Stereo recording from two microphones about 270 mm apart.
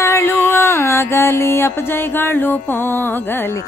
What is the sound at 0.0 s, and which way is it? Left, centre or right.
Mantra, centre.